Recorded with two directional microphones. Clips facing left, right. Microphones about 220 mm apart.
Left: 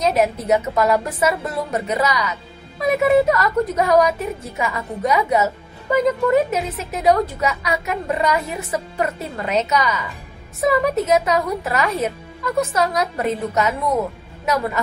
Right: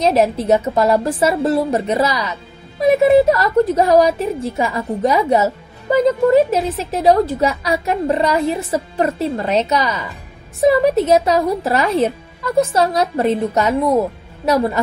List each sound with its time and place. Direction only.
0.0 s a woman's voice: 30° right (ahead or behind)